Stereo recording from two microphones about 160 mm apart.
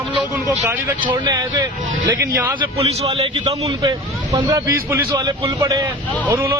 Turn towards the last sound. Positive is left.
turn(degrees=-15)  # may be behind; listen again after turning